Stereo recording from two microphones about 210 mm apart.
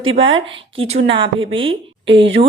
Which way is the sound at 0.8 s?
30° right (ahead or behind).